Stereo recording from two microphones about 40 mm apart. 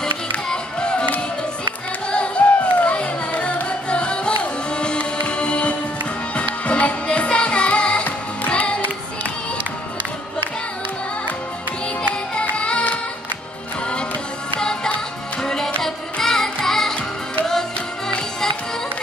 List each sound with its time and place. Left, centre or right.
0.0 s music: left
12.4 s music: left
14.6 s music: centre